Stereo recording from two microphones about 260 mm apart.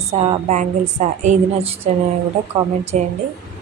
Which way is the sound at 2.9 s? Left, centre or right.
Right.